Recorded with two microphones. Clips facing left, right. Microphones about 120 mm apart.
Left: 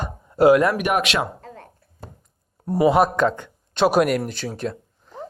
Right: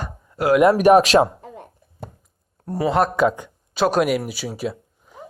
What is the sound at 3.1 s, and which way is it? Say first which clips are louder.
Speech: right 2 dB; 10° right (ahead or behind).